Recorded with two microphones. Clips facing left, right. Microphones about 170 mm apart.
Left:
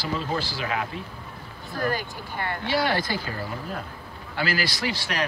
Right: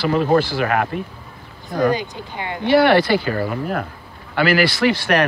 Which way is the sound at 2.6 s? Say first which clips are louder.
Right 12 dB; 65° right (ahead or behind).